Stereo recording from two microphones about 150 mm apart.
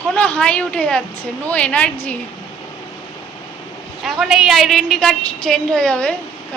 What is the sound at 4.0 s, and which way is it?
A woman's voice, centre (ahead or behind).